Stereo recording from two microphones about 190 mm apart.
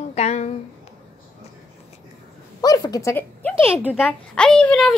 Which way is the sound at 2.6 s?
20° left (ahead or behind).